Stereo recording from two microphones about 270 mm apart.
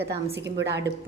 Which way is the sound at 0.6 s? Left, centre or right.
Right.